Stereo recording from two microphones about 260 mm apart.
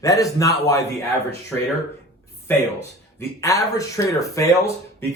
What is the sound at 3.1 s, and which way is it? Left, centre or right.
Speech, centre.